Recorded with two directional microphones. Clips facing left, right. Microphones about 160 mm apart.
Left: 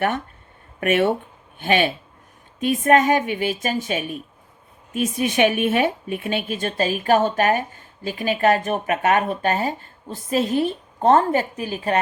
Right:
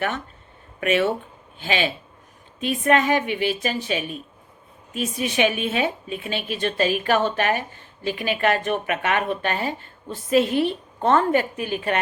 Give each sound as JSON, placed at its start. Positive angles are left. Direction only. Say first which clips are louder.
{"t": 0.8, "sound": "a woman's voice", "louder": "left 2 dB", "side_deg": 50}